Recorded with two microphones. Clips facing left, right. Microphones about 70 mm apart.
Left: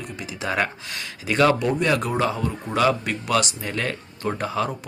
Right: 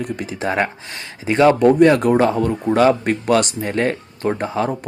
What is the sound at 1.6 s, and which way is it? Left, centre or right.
Speech, right.